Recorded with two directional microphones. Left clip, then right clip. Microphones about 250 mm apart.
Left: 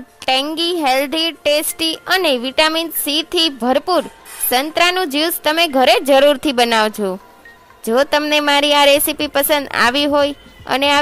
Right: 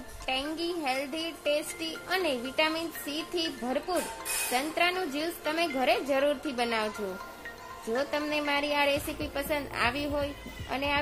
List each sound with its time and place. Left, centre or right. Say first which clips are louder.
0.2 s a woman's voice: left 15 dB; left
7.9 s a woman's voice: left 16 dB; left